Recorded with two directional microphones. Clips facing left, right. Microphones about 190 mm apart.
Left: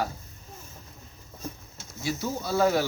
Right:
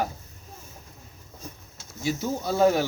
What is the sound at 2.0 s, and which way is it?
Speech, 15° right (ahead or behind).